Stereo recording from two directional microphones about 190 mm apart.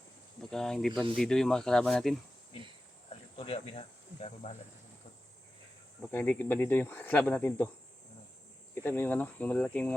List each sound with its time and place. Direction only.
0.5 s speech: centre (ahead or behind)
3.1 s speech: 30° left (ahead or behind)
6.0 s speech: 10° left (ahead or behind)
8.7 s speech: 10° left (ahead or behind)